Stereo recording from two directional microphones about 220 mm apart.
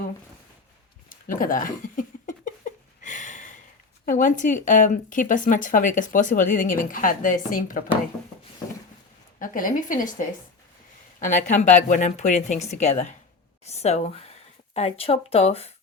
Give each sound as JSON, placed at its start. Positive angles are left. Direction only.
{"t": 1.1, "sound": "a sound", "side_deg": 40}
{"t": 4.0, "sound": "speech", "side_deg": 35}
{"t": 9.4, "sound": "speech", "side_deg": 40}
{"t": 11.2, "sound": "speech", "side_deg": 35}